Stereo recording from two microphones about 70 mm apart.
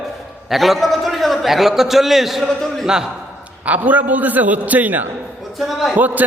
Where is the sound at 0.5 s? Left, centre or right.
Centre.